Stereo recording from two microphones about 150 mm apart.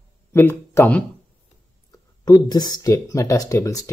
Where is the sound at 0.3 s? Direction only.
15° left (ahead or behind).